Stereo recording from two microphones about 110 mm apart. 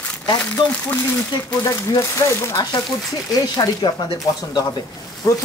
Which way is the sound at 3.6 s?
45° left (ahead or behind).